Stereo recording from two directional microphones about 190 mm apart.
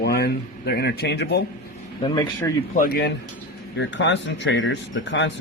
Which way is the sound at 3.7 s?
70° left (ahead or behind).